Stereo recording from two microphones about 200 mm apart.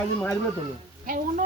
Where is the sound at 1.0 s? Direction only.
45° right (ahead or behind).